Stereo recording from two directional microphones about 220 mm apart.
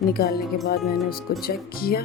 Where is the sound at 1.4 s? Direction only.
45° left (ahead or behind).